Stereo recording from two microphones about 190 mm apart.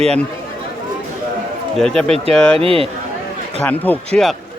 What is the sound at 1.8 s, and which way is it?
Speech, 5° left (ahead or behind).